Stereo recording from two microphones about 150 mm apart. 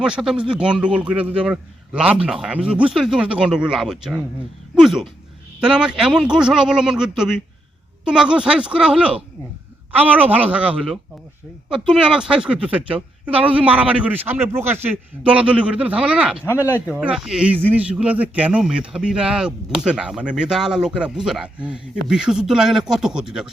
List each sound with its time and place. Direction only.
0.0 s a woman's voice: 5° right (ahead or behind)
16.5 s speech: 20° left (ahead or behind)
16.9 s speech: 5° right (ahead or behind)